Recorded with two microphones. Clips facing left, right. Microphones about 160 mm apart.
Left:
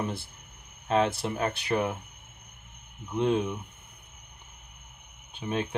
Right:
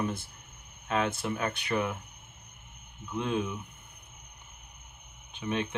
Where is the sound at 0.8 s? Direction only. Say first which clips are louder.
Left 4 dB; 30° left (ahead or behind).